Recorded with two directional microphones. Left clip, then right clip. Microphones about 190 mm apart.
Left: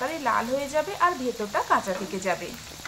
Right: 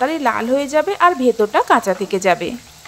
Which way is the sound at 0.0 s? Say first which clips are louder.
Right 8 dB; 35° right (ahead or behind).